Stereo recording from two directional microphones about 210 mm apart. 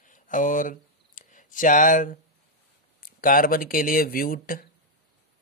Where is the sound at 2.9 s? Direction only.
45° left (ahead or behind).